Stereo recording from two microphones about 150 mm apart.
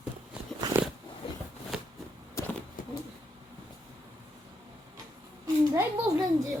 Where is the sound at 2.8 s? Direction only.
65° left (ahead or behind).